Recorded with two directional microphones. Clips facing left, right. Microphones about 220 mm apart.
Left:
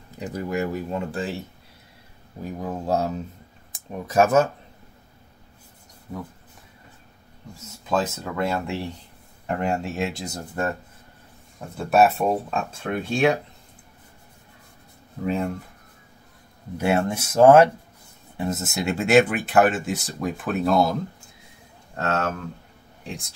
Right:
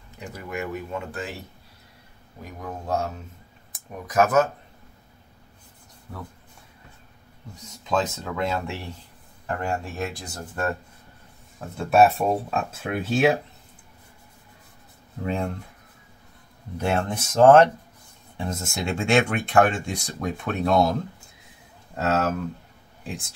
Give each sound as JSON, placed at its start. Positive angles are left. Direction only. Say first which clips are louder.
{"t": 0.2, "sound": "speech", "louder": "left 6 dB", "side_deg": 35}
{"t": 2.6, "sound": "speech", "louder": "left 3 dB", "side_deg": 35}
{"t": 6.1, "sound": "speech", "louder": "left 5 dB", "side_deg": 20}
{"t": 7.5, "sound": "speech", "louder": "left 1 dB", "side_deg": 5}
{"t": 11.7, "sound": "speech", "louder": "even", "side_deg": 0}
{"t": 15.2, "sound": "speech", "louder": "left 2 dB", "side_deg": 5}
{"t": 16.7, "sound": "speech", "louder": "left 3 dB", "side_deg": 5}